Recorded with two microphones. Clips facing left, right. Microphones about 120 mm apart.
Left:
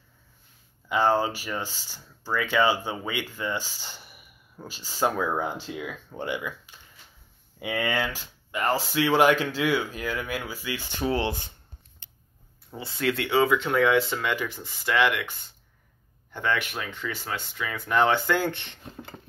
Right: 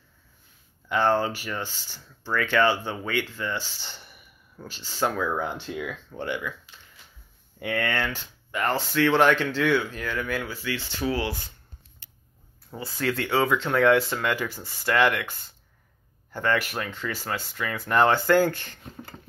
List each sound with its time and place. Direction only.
0.8 s speech: 5° left (ahead or behind)
3.8 s a sound: 10° left (ahead or behind)
4.6 s speech: 10° left (ahead or behind)
7.5 s speech: 10° left (ahead or behind)
12.7 s speech: 10° right (ahead or behind)
13.2 s speech: 5° left (ahead or behind)
16.3 s speech: centre (ahead or behind)